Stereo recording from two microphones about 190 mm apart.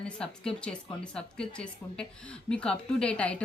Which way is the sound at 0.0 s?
5° left (ahead or behind).